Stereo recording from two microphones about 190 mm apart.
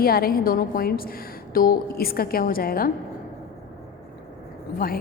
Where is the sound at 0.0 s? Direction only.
55° left (ahead or behind).